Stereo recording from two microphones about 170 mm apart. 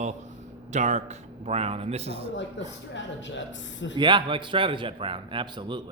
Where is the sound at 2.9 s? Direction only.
90° left.